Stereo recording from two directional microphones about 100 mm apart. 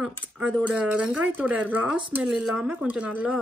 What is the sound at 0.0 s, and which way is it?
Speech, 10° right (ahead or behind).